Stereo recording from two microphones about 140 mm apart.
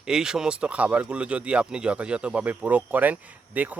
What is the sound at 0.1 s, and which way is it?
Speech, 5° right (ahead or behind).